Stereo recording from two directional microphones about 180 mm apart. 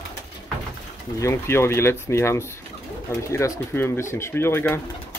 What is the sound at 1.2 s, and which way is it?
Speech, 15° left (ahead or behind).